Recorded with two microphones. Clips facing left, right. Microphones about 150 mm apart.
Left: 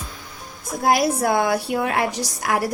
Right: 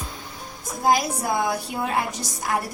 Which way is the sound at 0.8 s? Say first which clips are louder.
Left 3 dB; 65° left (ahead or behind).